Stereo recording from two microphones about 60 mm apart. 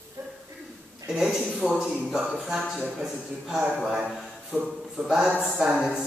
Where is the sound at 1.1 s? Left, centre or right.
Centre.